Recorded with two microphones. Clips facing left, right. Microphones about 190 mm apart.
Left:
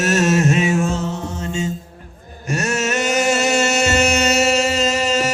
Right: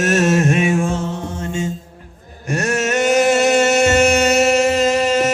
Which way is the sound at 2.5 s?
55° right (ahead or behind).